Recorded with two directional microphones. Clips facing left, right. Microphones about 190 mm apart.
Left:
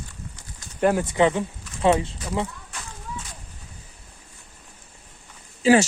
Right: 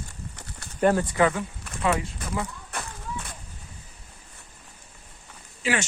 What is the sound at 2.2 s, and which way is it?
Speech, 55° right (ahead or behind).